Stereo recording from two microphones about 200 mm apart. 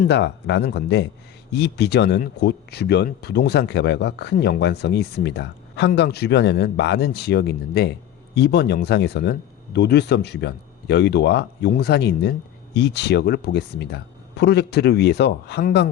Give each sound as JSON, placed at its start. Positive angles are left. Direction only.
{"t": 0.1, "sound": "speech", "side_deg": 60}